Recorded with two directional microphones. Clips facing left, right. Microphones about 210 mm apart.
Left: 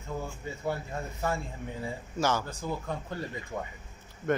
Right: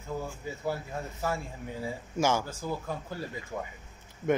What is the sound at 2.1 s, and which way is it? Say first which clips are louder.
A man's voice: right 2 dB; 10° right (ahead or behind).